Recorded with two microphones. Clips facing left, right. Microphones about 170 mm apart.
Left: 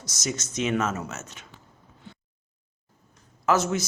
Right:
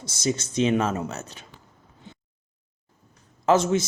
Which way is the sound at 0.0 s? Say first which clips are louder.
Right 6 dB; 30° right (ahead or behind).